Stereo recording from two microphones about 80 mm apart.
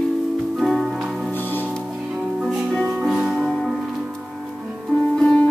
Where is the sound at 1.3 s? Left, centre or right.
Left.